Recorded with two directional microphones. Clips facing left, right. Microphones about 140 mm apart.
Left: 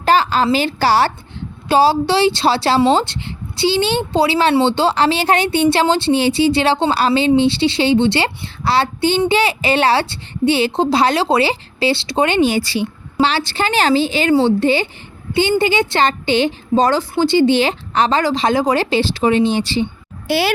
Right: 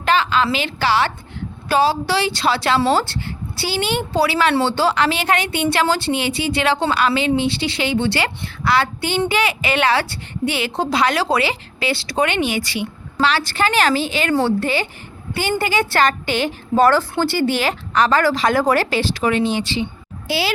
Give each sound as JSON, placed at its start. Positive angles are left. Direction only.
{"t": 0.0, "sound": "a sound", "side_deg": 35}
{"t": 0.5, "sound": "a woman's voice", "side_deg": 35}
{"t": 1.6, "sound": "a woman's voice", "side_deg": 30}
{"t": 2.8, "sound": "a woman's voice", "side_deg": 20}
{"t": 20.2, "sound": "speech", "side_deg": 55}